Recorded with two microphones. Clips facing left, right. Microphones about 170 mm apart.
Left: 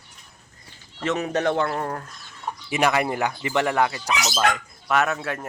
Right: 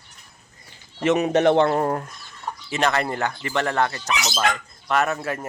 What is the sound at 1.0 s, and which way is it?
Speech, 20° right (ahead or behind).